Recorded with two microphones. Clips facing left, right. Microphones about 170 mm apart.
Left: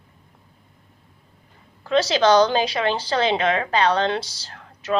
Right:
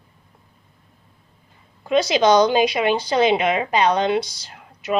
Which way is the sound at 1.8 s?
15° right (ahead or behind).